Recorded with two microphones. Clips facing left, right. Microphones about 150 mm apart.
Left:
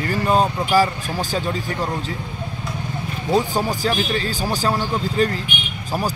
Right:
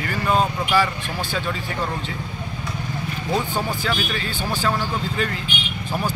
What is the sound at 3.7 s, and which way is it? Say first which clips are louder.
Speech: left 4 dB; 40° left (ahead or behind).